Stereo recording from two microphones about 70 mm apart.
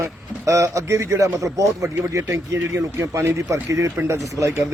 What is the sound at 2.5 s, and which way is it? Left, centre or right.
Speech, right.